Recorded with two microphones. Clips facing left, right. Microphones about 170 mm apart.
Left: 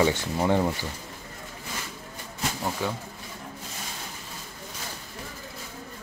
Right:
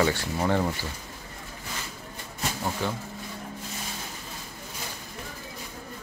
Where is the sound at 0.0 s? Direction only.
15° left (ahead or behind).